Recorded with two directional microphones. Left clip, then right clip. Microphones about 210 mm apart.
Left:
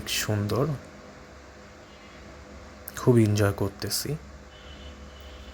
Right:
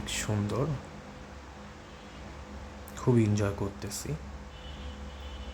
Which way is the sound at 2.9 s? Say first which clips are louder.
Left 6 dB; 25° left (ahead or behind).